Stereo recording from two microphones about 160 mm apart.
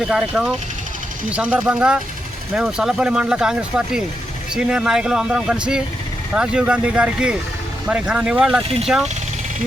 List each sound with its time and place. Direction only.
0.0 s speech: 5° right (ahead or behind)
8.6 s speech: 40° right (ahead or behind)